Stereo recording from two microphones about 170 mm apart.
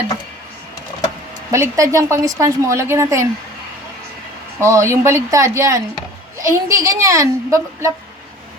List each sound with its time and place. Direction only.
1.5 s a woman's voice: 20° right (ahead or behind)
4.6 s a woman's voice: 15° right (ahead or behind)